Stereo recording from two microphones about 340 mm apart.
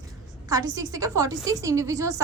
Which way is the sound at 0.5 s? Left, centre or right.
Centre.